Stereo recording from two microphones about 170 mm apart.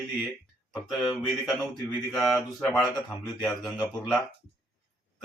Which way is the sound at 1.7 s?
25° left (ahead or behind).